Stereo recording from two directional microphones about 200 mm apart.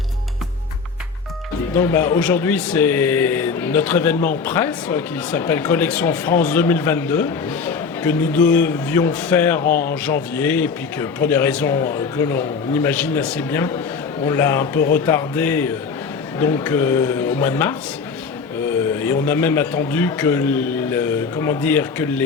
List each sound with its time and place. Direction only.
1.7 s speech: 10° left (ahead or behind)
9.6 s speech: 45° left (ahead or behind)
10.3 s speech: 10° left (ahead or behind)
19.2 s speech: 10° left (ahead or behind)